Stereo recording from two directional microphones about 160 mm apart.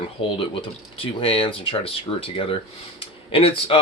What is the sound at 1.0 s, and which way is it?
Speech, 35° left (ahead or behind).